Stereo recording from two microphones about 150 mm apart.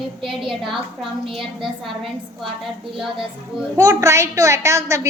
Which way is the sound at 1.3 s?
Centre (ahead or behind).